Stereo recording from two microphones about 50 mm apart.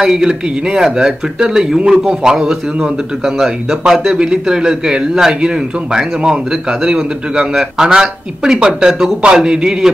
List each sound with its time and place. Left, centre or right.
0.0 s speech: centre
6.8 s speech: centre